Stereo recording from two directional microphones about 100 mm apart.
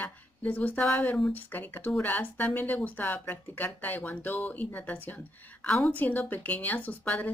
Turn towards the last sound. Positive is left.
turn(degrees=15)  # may be behind; listen again after turning